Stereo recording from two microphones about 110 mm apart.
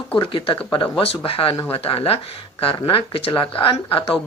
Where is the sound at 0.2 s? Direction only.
50° left (ahead or behind).